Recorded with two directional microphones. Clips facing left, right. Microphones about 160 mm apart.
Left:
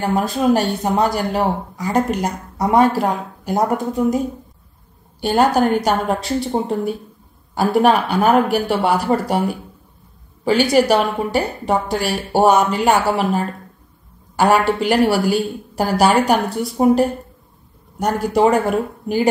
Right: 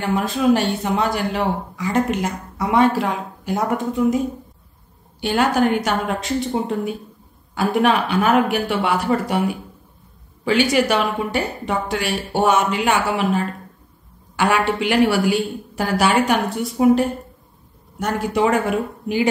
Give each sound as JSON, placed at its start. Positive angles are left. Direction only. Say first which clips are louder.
{"t": 0.0, "sound": "speech", "louder": "left 1 dB", "side_deg": 40}
{"t": 5.2, "sound": "speech", "louder": "left 3 dB", "side_deg": 40}